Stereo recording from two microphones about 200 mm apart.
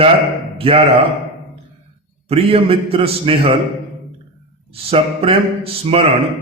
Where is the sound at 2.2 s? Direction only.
30° right (ahead or behind).